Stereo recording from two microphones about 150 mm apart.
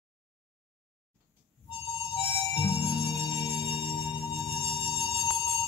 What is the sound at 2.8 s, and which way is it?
Music, 40° left (ahead or behind).